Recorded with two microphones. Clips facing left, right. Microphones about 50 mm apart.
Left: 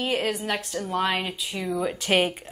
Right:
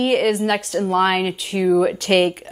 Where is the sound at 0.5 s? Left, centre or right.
Right.